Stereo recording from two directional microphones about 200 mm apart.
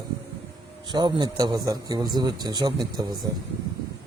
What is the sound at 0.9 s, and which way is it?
Speech, 20° right (ahead or behind).